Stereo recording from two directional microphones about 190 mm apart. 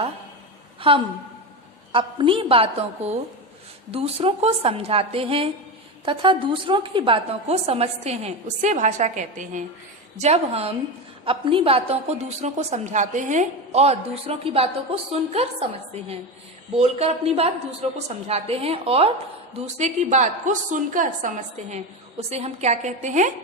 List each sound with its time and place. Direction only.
0.8 s a woman's voice: 25° right (ahead or behind)
16.7 s a woman's voice: 35° right (ahead or behind)